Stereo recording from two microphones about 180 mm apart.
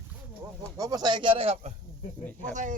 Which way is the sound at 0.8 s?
20° right (ahead or behind).